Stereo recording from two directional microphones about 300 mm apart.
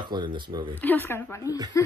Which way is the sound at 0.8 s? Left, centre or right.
Centre.